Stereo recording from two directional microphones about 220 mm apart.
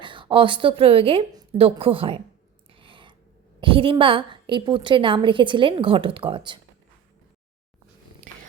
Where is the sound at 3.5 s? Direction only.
25° right (ahead or behind).